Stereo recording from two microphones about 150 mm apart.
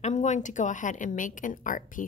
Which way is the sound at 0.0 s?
50° left (ahead or behind).